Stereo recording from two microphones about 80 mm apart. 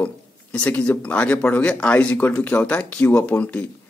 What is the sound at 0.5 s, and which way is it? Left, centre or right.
Speech, centre.